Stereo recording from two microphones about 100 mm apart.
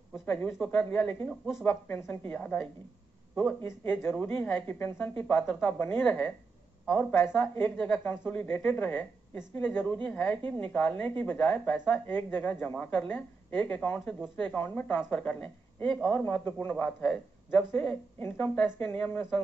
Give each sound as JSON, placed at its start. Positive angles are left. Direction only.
{"t": 0.6, "sound": "a woman's voice", "side_deg": 20}
{"t": 2.3, "sound": "a woman's voice", "side_deg": 15}